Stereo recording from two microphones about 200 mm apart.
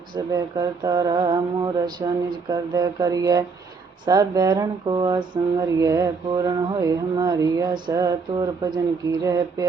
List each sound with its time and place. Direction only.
0.2 s speech: 15° right (ahead or behind)